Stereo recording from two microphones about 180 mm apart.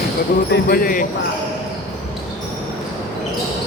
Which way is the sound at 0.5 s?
55° left (ahead or behind).